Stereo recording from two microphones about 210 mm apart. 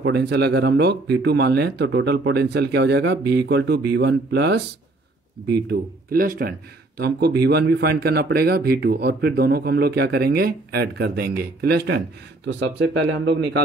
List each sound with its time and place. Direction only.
0.0 s speech: 55° right (ahead or behind)
13.2 s a man's voice: 55° right (ahead or behind)